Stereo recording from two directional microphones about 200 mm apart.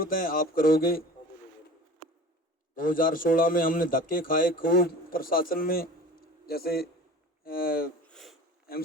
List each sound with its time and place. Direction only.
0.0 s a man's voice: 45° left (ahead or behind)
2.7 s a man's voice: 45° left (ahead or behind)
8.0 s sniff: centre (ahead or behind)